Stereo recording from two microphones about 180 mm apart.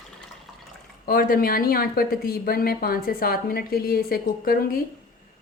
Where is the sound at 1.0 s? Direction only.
55° left (ahead or behind).